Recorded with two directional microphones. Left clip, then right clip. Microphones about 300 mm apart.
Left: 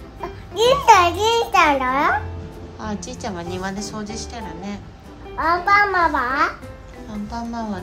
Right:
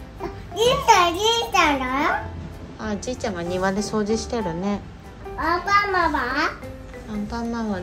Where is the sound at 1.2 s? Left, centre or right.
Centre.